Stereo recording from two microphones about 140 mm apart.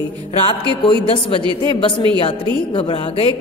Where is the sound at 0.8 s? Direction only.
40° left (ahead or behind).